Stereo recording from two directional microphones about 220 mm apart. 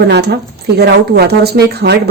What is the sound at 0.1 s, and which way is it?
Speech, 50° right (ahead or behind).